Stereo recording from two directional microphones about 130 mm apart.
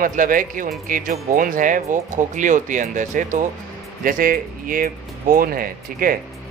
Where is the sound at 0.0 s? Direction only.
90° right.